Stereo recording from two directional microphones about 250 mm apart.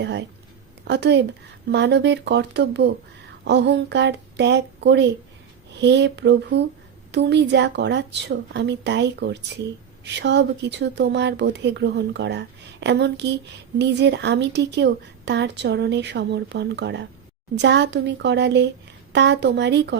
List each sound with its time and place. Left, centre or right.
0.0 s a woman's voice: right